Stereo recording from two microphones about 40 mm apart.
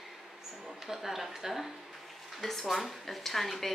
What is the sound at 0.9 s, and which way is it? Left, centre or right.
Speech, centre.